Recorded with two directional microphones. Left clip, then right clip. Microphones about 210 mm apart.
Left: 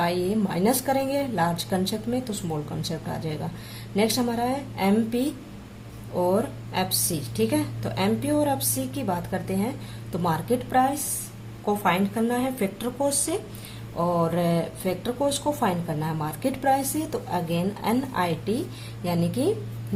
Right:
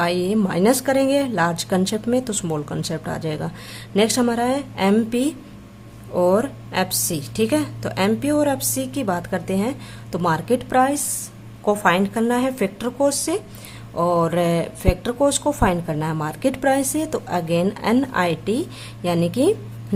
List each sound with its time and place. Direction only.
0.0 s a woman's voice: 30° right (ahead or behind)